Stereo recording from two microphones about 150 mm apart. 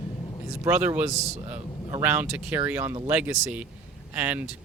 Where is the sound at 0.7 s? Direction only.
10° right (ahead or behind).